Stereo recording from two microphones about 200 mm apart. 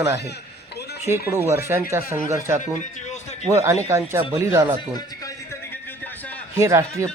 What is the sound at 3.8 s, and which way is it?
Speech, 15° right (ahead or behind).